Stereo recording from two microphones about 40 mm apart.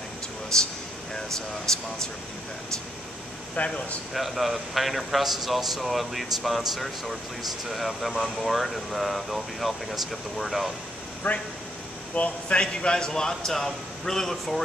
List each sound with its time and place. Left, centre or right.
0.5 s a man's voice: centre
1.7 s a man's voice: centre
3.5 s speech: left
4.1 s speech: centre
11.3 s speech: left
12.2 s a man's voice: left; by 14.3 s centre